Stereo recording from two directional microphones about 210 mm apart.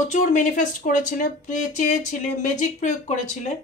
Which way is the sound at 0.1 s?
35° left (ahead or behind).